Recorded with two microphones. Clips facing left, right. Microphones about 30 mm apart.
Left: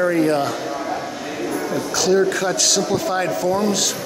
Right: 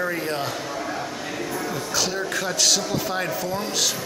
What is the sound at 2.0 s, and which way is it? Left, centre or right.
Speech, centre.